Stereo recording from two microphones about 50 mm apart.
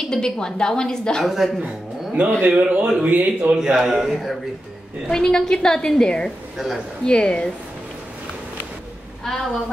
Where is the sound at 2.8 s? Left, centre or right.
Centre.